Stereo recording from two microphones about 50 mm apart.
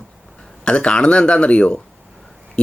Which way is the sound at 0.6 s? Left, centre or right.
Centre.